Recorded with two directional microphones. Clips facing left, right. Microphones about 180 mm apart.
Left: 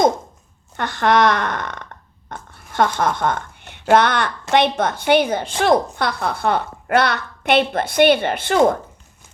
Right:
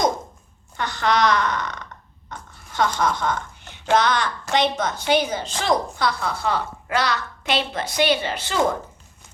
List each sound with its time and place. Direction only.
0.8 s a woman's voice: 55° left (ahead or behind)